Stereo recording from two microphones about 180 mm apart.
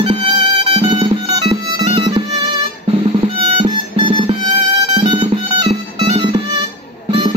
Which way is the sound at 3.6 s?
25° right (ahead or behind).